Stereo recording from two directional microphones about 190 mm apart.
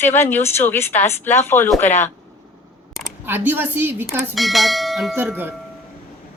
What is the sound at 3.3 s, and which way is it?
Speech, 10° right (ahead or behind).